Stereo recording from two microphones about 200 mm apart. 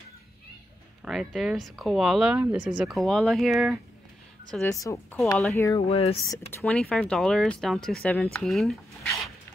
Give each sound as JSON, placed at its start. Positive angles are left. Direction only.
{"t": 1.0, "sound": "speech", "side_deg": 0}
{"t": 4.5, "sound": "a woman's voice", "side_deg": 10}
{"t": 5.2, "sound": "speech", "side_deg": 0}
{"t": 5.8, "sound": "speech", "side_deg": 30}
{"t": 6.6, "sound": "speech", "side_deg": 5}